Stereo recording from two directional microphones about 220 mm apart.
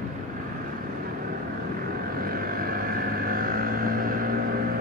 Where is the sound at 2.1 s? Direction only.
40° right (ahead or behind).